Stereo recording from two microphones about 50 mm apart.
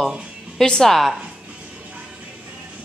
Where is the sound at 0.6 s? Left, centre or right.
Centre.